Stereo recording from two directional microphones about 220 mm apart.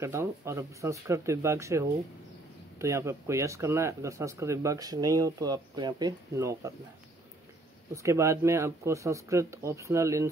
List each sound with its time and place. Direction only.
0.0 s speech: 10° right (ahead or behind)
7.9 s speech: 15° right (ahead or behind)